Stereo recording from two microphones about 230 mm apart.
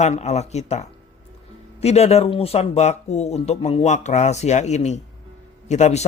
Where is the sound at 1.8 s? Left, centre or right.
Left.